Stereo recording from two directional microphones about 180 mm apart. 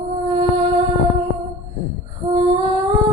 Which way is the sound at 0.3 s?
25° right (ahead or behind).